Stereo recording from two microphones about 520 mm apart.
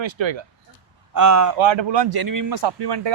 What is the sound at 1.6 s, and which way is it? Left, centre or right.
Speech, right.